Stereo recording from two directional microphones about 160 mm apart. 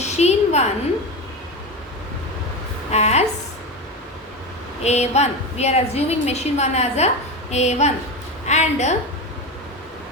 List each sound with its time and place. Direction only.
0.0 s a sound: 45° left (ahead or behind)
2.9 s a woman's voice: 45° left (ahead or behind)
4.8 s a woman's voice: 45° left (ahead or behind)